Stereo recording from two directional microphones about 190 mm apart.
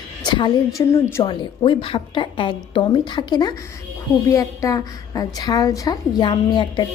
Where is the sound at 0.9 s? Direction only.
15° left (ahead or behind).